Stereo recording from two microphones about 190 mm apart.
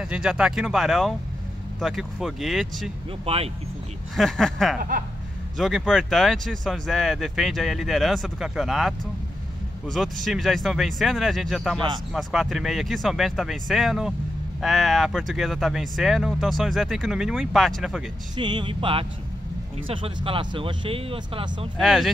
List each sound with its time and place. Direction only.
0.0 s speech: 5° right (ahead or behind)
3.3 s speech: 30° right (ahead or behind)
4.2 s speech: 5° left (ahead or behind)
18.3 s speech: 25° right (ahead or behind)
20.2 s speech: 30° right (ahead or behind)
21.7 s speech: centre (ahead or behind)